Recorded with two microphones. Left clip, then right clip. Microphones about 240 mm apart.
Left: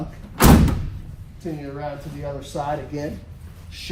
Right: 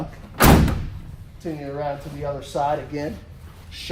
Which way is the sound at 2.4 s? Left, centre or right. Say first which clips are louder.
Right 4 dB; right.